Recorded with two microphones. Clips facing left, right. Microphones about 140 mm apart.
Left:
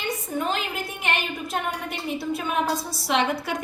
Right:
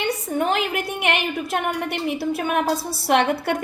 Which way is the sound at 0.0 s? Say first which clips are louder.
Right 5 dB; 65° right (ahead or behind).